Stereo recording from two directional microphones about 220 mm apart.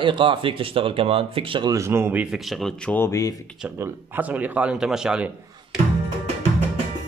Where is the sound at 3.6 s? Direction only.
10° right (ahead or behind).